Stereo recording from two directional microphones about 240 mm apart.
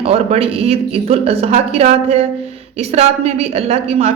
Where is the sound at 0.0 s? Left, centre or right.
Right.